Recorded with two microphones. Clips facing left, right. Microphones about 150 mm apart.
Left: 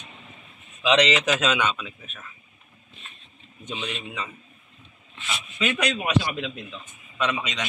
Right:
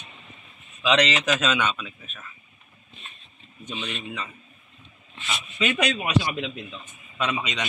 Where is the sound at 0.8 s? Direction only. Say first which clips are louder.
Left 2 dB; 15° left (ahead or behind).